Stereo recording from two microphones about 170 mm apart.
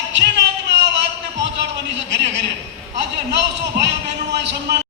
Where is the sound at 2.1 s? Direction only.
90° right.